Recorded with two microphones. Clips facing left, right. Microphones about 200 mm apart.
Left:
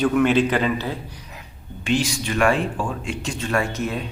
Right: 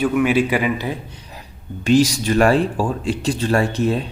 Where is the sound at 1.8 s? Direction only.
40° right (ahead or behind).